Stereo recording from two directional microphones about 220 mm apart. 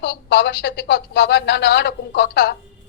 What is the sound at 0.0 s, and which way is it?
A woman's voice, 50° left (ahead or behind).